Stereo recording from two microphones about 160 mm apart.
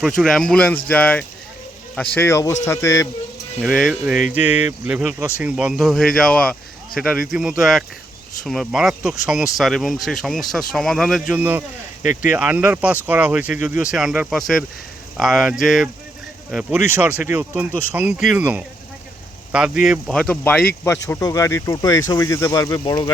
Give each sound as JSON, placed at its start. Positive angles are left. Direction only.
{"t": 0.2, "sound": "speech", "side_deg": 0}
{"t": 3.6, "sound": "speech", "side_deg": 0}
{"t": 19.8, "sound": "speech", "side_deg": 0}